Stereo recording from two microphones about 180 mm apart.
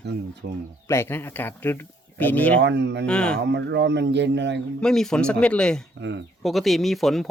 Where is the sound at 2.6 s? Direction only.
70° right (ahead or behind).